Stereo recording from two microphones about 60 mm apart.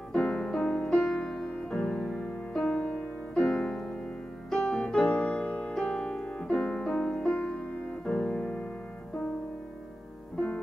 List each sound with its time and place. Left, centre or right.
0.1 s music: centre